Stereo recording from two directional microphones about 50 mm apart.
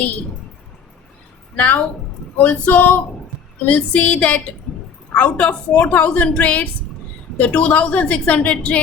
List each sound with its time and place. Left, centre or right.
1.5 s female singing: left
3.7 s a woman's voice: left